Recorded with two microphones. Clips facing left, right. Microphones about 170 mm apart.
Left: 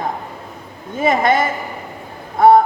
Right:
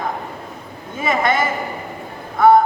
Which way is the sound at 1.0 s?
35° left (ahead or behind).